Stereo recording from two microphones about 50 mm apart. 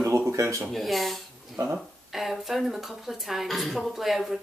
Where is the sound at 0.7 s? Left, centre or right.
Centre.